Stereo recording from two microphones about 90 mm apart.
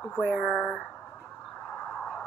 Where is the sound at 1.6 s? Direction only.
10° left (ahead or behind).